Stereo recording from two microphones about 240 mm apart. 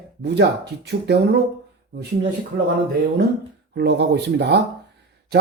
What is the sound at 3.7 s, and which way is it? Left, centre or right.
Speech, right.